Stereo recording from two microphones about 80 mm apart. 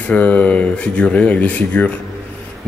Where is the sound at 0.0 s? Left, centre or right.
Centre.